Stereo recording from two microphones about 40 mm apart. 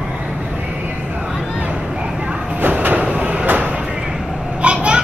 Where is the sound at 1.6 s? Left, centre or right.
Right.